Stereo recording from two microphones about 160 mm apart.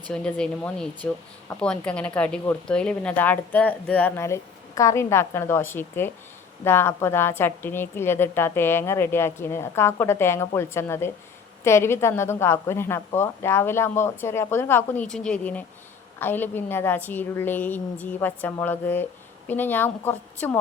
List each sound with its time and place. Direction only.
0.1 s speech: 5° left (ahead or behind)